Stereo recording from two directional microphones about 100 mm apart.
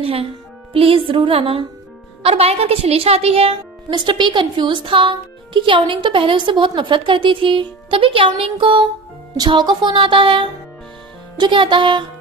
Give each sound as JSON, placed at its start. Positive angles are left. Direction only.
{"t": 0.0, "sound": "a woman's voice", "side_deg": -75}
{"t": 2.2, "sound": "a woman's voice", "side_deg": -80}
{"t": 3.9, "sound": "a woman's voice", "side_deg": -50}
{"t": 9.4, "sound": "a woman's voice", "side_deg": -50}